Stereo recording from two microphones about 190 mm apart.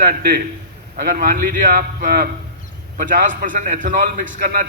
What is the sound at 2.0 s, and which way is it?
A man's voice, 45° right (ahead or behind).